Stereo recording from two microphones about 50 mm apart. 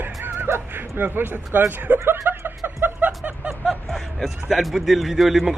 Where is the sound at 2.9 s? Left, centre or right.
Right.